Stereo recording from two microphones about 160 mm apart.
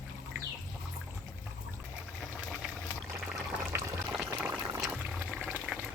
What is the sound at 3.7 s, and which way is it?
Water, 15° right (ahead or behind).